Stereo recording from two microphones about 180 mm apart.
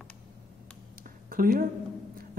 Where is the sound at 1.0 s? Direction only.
50° right (ahead or behind).